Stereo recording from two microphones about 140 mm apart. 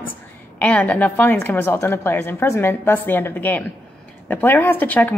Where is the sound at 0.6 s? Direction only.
10° left (ahead or behind).